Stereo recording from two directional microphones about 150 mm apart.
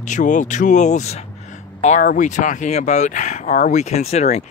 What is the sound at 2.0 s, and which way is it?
Speech, 65° left (ahead or behind).